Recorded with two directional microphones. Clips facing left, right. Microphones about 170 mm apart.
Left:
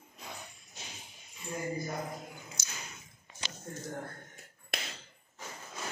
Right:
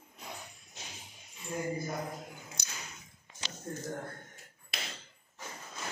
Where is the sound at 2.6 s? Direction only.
60° right (ahead or behind).